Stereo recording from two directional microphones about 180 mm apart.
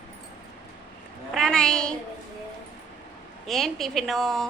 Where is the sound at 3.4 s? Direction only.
Centre (ahead or behind).